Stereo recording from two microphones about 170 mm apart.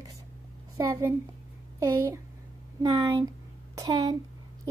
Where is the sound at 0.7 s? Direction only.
15° right (ahead or behind).